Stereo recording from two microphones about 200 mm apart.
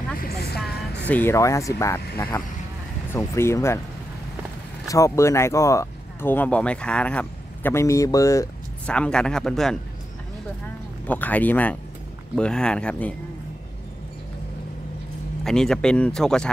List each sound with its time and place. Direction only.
0.2 s vehicle: 55° left (ahead or behind)
1.0 s speech: 10° left (ahead or behind)
4.8 s speech: 15° left (ahead or behind)
8.9 s speech: 5° left (ahead or behind)
11.1 s speech: 10° left (ahead or behind)
15.4 s speech: 5° left (ahead or behind)